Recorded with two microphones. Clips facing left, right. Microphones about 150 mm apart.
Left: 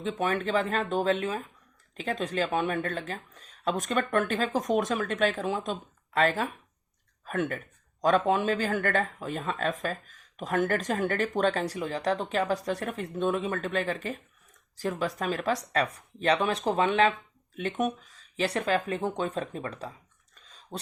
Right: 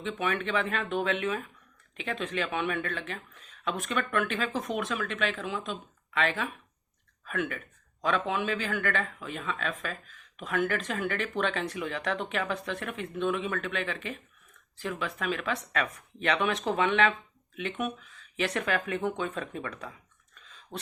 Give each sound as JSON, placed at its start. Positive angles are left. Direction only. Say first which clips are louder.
{"t": 0.0, "sound": "speech", "louder": "left 3 dB", "side_deg": 35}